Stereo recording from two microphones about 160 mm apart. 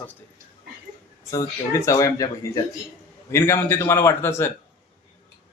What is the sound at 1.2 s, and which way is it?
A man's voice, 20° left (ahead or behind).